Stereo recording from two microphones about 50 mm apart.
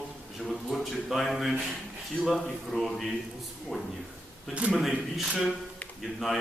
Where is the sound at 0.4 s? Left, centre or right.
Centre.